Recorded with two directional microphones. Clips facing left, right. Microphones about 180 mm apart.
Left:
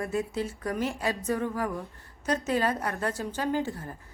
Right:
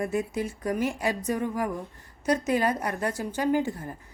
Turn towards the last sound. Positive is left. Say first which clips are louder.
# right 4 dB
turn(degrees=-15)  # may be behind; listen again after turning